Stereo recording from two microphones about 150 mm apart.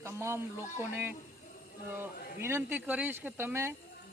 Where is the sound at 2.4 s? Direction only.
15° right (ahead or behind).